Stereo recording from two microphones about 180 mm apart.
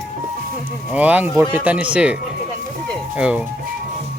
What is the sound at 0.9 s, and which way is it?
Speech, 10° right (ahead or behind).